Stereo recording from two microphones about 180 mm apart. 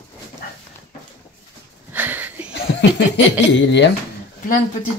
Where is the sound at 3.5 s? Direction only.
80° left.